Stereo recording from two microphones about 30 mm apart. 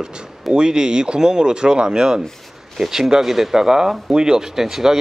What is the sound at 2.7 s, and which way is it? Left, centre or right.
Speech, centre.